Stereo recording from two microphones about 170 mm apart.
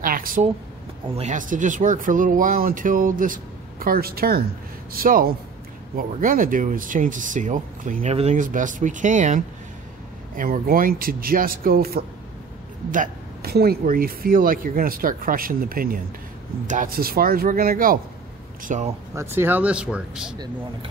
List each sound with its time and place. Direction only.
0.0 s a sound: 55° right (ahead or behind)
1.0 s speech: 35° right (ahead or behind)
1.3 s speech: 50° right (ahead or behind)
19.1 s speech: 15° right (ahead or behind)